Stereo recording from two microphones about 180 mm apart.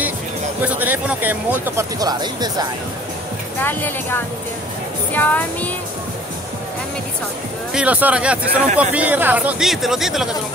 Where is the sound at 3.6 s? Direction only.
10° left (ahead or behind).